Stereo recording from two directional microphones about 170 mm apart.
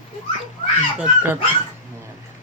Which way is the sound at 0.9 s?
10° right (ahead or behind).